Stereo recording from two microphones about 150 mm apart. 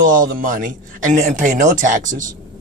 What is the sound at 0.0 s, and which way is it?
A man's voice, 65° right (ahead or behind).